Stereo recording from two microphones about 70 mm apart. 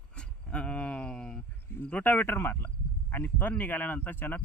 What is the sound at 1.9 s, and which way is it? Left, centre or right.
Speech, left.